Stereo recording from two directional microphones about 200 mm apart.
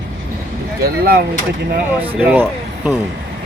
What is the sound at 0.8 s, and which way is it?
Speech, 50° right (ahead or behind).